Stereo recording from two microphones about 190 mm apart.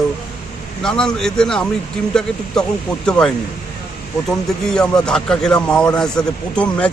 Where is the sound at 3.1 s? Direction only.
5° left (ahead or behind).